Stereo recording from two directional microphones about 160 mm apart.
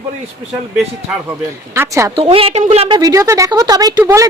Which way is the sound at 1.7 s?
20° right (ahead or behind).